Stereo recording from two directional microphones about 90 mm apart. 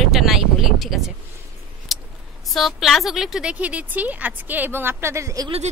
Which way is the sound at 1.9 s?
Centre (ahead or behind).